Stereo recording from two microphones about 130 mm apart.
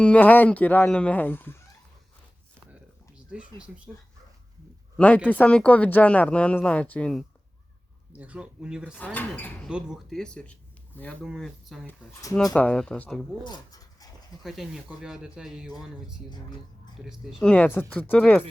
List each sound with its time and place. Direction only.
0.0 s speech: 10° left (ahead or behind)
3.3 s speech: 10° right (ahead or behind)
4.9 s speech: 10° left (ahead or behind)
8.2 s speech: 10° right (ahead or behind)
9.1 s speech: 15° left (ahead or behind)
9.6 s speech: 5° right (ahead or behind)
11.9 s speech: 20° left (ahead or behind)
12.5 s speech: 5° left (ahead or behind)
13.4 s dog: 30° left (ahead or behind)
14.4 s speech: centre (ahead or behind)
16.3 s speech: 35° left (ahead or behind)
17.0 s speech: 5° right (ahead or behind)
17.4 s speech: 10° left (ahead or behind)